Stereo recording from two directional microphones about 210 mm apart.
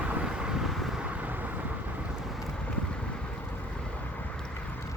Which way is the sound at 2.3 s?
5° left (ahead or behind).